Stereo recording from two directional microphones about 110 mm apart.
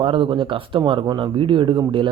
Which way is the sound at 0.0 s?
50° right (ahead or behind).